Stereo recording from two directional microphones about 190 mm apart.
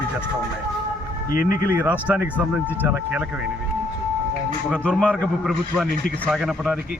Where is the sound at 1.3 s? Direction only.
50° left (ahead or behind).